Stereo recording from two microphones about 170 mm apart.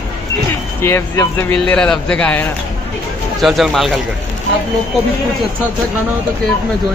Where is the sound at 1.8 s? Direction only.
5° left (ahead or behind).